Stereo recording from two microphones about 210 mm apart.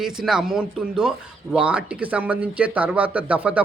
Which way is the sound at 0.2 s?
5° right (ahead or behind).